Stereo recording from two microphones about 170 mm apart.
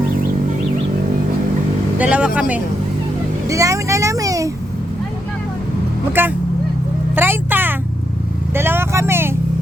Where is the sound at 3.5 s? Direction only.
20° right (ahead or behind).